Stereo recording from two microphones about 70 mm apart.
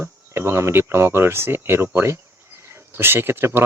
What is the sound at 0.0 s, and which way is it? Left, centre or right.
Speech, right.